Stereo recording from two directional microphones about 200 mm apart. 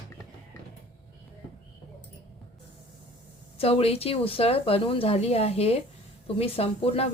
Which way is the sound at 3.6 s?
30° left (ahead or behind).